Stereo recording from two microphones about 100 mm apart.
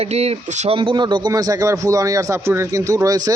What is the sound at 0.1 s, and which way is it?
Speech, 90° right.